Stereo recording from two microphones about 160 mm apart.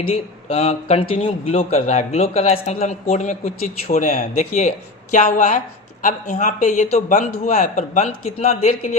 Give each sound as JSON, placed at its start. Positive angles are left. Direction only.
{"t": 0.0, "sound": "speech", "side_deg": 40}